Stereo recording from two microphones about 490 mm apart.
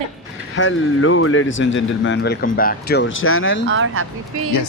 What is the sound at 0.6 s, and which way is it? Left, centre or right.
Speech, left.